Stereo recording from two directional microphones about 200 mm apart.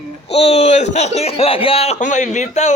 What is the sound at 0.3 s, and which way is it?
Speech, 30° left (ahead or behind).